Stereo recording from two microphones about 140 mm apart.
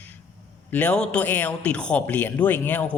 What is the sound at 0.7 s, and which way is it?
A man's voice, 10° left (ahead or behind).